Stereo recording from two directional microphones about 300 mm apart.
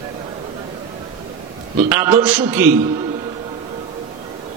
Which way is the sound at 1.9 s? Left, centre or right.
Centre.